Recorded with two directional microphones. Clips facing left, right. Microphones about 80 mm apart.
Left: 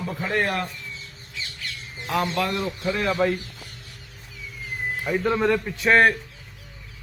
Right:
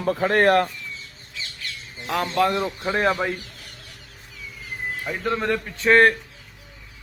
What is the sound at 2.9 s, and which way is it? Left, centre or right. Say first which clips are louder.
Speech: right 4 dB; right.